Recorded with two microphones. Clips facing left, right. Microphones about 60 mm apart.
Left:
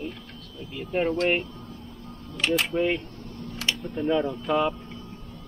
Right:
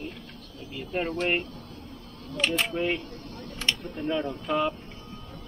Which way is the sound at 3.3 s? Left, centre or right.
Right.